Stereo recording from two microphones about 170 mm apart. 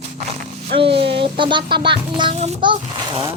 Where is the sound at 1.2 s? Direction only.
30° right (ahead or behind).